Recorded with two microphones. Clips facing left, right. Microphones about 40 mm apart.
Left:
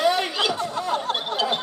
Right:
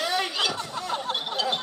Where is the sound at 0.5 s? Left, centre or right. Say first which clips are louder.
Left 5 dB; left.